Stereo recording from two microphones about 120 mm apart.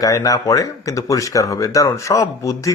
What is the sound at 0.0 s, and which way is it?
Speech, 30° left (ahead or behind).